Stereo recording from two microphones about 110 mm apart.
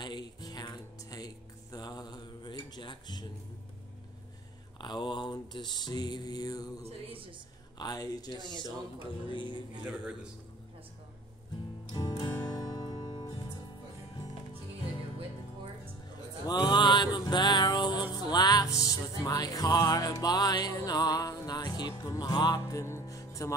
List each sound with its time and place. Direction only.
0.0 s music: 40° left (ahead or behind)
4.7 s music: 45° left (ahead or behind)
6.8 s speech: 60° right (ahead or behind)
7.8 s music: 35° left (ahead or behind)
9.0 s music: 50° left (ahead or behind)
12.1 s music: 25° left (ahead or behind)
12.4 s music: 35° left (ahead or behind)
16.4 s mantra: 40° left (ahead or behind)
18.1 s music: 40° left (ahead or behind)